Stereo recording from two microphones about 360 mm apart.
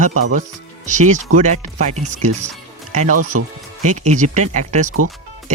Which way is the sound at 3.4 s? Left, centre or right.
Right.